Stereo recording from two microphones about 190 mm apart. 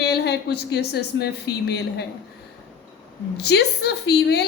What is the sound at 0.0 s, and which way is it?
A woman's voice, 60° left (ahead or behind).